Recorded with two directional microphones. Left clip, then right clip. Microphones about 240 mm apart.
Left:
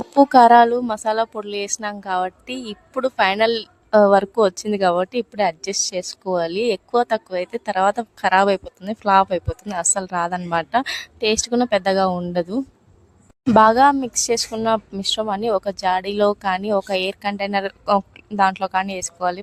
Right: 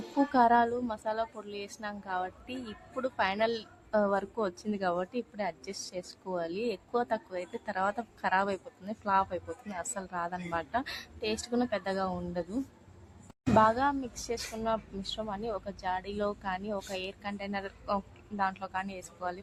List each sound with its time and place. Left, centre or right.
0.2 s a woman's voice: left